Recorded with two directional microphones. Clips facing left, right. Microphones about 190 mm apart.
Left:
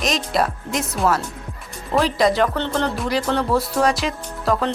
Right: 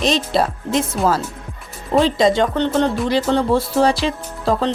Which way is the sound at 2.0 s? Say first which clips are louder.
Right 2 dB; 25° right (ahead or behind).